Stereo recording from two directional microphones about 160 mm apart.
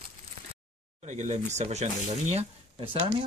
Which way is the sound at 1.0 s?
45° right (ahead or behind).